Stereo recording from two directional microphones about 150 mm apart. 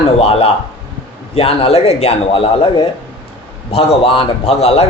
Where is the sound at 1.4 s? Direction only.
40° left (ahead or behind).